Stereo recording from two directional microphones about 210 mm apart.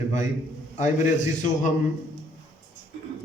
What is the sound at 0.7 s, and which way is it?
Speech, 35° left (ahead or behind).